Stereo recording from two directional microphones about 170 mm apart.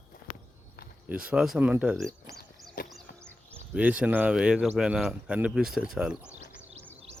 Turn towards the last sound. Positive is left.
turn(degrees=-5)  # may be behind; listen again after turning